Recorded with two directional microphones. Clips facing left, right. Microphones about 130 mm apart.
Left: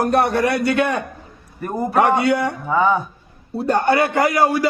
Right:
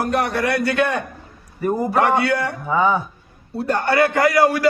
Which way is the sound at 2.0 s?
15° left (ahead or behind).